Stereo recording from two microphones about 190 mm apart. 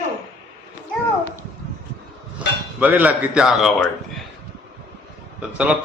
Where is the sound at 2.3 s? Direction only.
10° right (ahead or behind).